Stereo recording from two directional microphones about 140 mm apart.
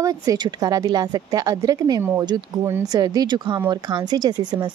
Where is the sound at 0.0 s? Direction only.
25° right (ahead or behind).